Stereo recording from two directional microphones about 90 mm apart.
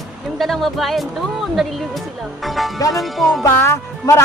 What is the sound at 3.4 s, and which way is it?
Speech, 30° left (ahead or behind).